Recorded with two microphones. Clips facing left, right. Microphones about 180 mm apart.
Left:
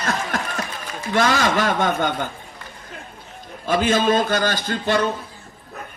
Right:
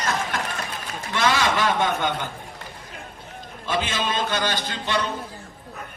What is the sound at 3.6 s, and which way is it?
A man's voice, 50° left (ahead or behind).